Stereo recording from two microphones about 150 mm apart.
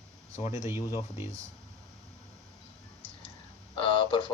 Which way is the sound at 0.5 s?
20° right (ahead or behind).